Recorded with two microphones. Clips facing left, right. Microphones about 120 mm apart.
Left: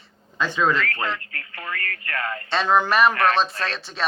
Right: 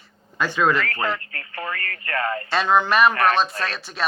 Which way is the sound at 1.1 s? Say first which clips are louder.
Right 3 dB; 30° right (ahead or behind).